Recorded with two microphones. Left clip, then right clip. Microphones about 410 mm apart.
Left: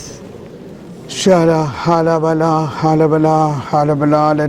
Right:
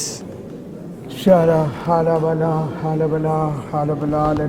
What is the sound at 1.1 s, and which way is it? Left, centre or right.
A man's voice, left.